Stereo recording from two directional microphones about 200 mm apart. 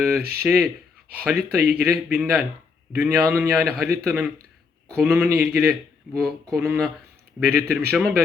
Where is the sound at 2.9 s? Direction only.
15° right (ahead or behind).